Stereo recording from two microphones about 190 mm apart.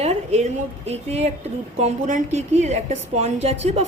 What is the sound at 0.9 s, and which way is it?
A woman's voice, 35° right (ahead or behind).